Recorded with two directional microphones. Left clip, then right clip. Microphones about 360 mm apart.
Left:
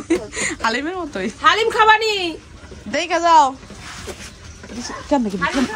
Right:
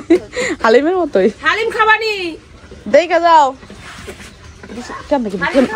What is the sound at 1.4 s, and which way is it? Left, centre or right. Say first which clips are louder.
Speech: even; left.